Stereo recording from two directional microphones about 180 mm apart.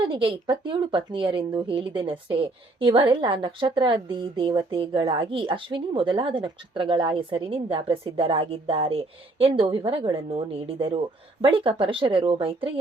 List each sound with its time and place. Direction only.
0.1 s speech: 30° right (ahead or behind)